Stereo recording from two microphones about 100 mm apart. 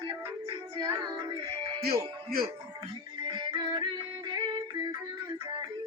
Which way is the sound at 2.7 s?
30° right (ahead or behind).